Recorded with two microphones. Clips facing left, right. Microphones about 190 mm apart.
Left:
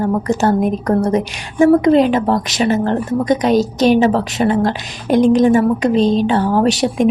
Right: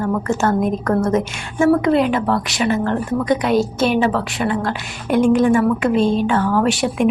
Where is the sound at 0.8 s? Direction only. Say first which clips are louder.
Left 2 dB; 15° left (ahead or behind).